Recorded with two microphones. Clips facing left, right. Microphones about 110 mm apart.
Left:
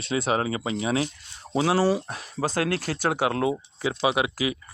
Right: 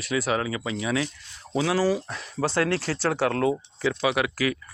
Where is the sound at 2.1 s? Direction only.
45° left (ahead or behind).